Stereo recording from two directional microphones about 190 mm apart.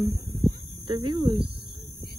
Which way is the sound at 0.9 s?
25° right (ahead or behind).